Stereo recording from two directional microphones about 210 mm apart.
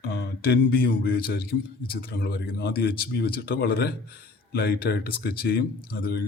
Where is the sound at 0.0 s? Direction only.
50° left (ahead or behind).